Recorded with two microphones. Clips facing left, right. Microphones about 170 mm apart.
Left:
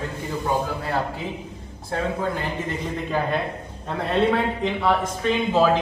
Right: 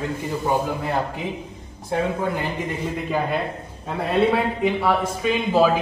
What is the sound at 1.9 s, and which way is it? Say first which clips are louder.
Speech: right 3 dB; 15° right (ahead or behind).